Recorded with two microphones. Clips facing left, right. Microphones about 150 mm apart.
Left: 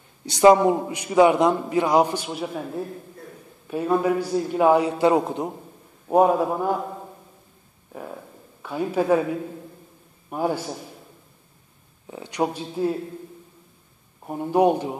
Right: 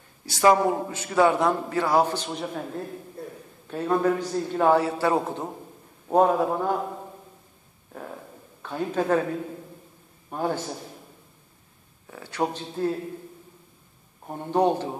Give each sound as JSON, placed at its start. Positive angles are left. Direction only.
{"t": 0.2, "sound": "a man's voice", "side_deg": 20}
{"t": 8.6, "sound": "a man's voice", "side_deg": 10}
{"t": 10.3, "sound": "a man's voice", "side_deg": 10}
{"t": 12.1, "sound": "a man's voice", "side_deg": 15}
{"t": 14.2, "sound": "a man's voice", "side_deg": 10}